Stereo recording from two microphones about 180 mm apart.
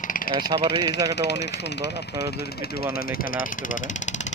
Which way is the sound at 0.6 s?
70° left (ahead or behind).